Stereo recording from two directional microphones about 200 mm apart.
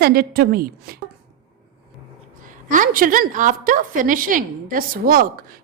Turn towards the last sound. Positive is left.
turn(degrees=-45)  # may be behind; listen again after turning